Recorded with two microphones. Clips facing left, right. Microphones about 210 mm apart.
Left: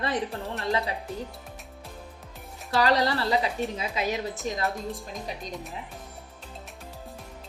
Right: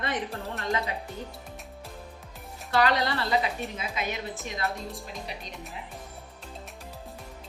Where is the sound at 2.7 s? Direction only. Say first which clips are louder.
Left 2 dB; 35° left (ahead or behind).